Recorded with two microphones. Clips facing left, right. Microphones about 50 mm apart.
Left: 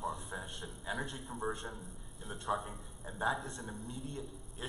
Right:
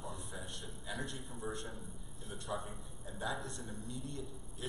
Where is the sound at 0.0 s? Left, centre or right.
Centre.